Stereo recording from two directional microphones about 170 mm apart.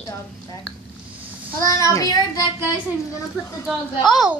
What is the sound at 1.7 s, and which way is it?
A child's voice, 20° left (ahead or behind).